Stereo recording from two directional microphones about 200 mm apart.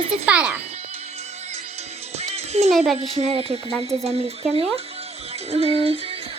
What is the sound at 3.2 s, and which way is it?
Speech, 30° right (ahead or behind).